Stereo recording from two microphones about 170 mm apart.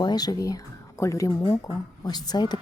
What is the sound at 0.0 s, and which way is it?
Speech, 25° left (ahead or behind).